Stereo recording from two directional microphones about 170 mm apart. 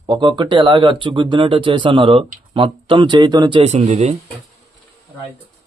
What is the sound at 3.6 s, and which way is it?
Speech, 40° right (ahead or behind).